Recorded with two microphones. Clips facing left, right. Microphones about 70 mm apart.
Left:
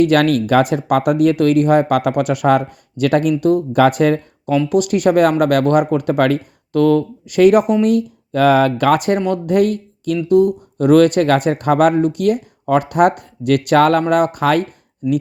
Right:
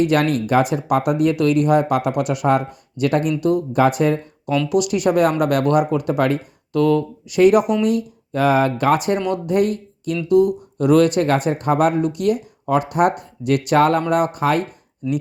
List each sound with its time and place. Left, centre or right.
0.0 s speech: left
4.7 s speech: left
9.5 s speech: left
10.2 s speech: left